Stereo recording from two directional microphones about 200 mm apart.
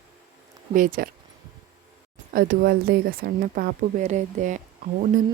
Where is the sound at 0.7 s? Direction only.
45° right (ahead or behind).